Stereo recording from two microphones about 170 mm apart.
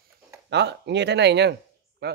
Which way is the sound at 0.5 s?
85° right.